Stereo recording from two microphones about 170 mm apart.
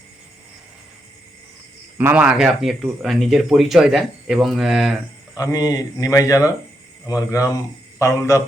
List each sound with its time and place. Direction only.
2.0 s speech: 10° right (ahead or behind)
5.4 s a man's voice: 20° left (ahead or behind)